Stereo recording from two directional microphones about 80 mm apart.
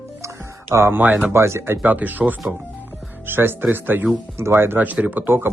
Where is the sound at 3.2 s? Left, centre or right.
Right.